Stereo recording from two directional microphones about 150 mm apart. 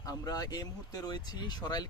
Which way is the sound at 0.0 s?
25° left (ahead or behind).